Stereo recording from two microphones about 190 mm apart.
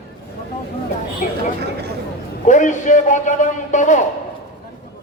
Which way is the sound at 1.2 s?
40° left (ahead or behind).